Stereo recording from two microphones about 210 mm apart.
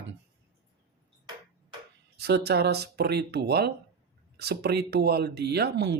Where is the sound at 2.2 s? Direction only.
50° right (ahead or behind).